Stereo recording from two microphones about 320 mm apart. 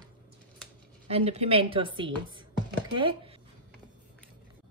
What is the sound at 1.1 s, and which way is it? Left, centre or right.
Speech, centre.